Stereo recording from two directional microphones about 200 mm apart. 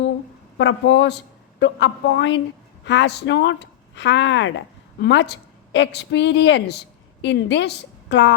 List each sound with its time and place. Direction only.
0.6 s a man's voice: 65° left (ahead or behind)